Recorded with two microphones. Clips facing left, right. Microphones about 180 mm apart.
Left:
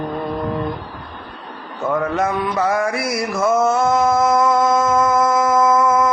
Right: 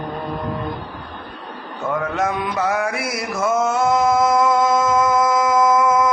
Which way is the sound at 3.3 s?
5° right (ahead or behind).